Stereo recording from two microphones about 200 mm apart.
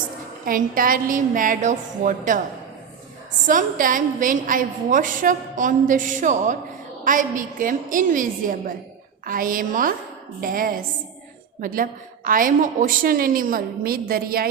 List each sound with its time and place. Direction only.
0.4 s a woman's voice: 45° right (ahead or behind)
3.4 s a woman's voice: 40° right (ahead or behind)